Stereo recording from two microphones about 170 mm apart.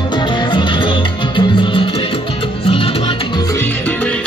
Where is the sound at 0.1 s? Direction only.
25° left (ahead or behind).